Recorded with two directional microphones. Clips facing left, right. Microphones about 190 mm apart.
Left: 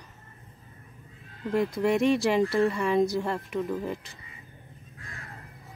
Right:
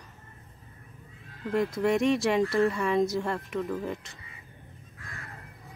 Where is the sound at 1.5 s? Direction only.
Centre (ahead or behind).